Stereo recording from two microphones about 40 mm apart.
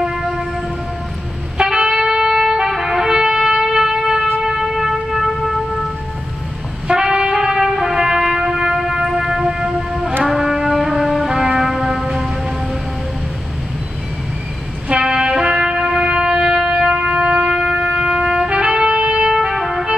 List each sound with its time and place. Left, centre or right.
0.0 s train: centre
1.6 s trumpet: centre
4.4 s vehicle: centre
6.9 s trumpet: centre
10.2 s music: centre
14.9 s music: right
19.3 s music: centre